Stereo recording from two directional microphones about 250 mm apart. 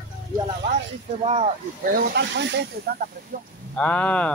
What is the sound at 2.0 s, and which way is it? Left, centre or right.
Speech, right.